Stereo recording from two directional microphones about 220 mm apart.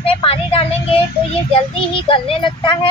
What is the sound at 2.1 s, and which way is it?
Speech, 25° left (ahead or behind).